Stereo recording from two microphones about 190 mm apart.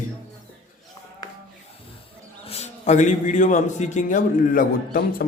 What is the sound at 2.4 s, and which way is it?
A man's voice, 35° left (ahead or behind).